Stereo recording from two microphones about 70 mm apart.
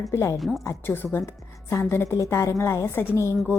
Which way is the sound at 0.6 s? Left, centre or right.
Left.